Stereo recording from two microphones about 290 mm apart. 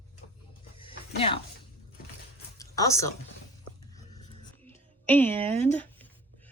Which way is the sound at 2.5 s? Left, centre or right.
Centre.